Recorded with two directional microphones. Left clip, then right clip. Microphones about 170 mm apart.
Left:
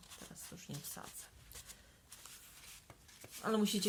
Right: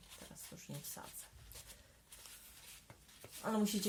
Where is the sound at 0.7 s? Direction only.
35° left (ahead or behind).